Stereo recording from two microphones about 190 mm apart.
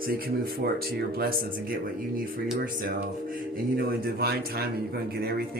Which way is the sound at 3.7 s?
55° right (ahead or behind).